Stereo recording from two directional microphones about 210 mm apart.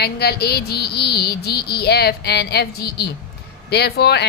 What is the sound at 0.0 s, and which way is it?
Speech, 50° left (ahead or behind).